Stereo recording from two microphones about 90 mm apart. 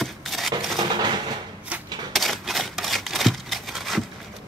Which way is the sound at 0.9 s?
55° right (ahead or behind).